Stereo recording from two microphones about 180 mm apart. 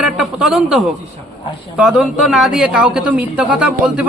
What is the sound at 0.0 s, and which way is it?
Speech, 5° right (ahead or behind).